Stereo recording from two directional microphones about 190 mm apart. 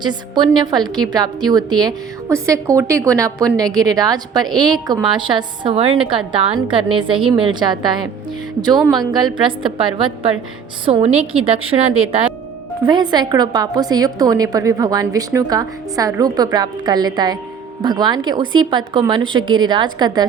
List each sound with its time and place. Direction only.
0.0 s a woman's voice: 25° right (ahead or behind)